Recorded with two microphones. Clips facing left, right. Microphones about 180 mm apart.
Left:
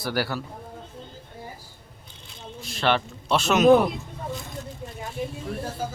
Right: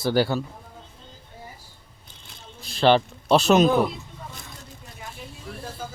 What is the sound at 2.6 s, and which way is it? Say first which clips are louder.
A man's voice: right 5 dB; 35° right (ahead or behind).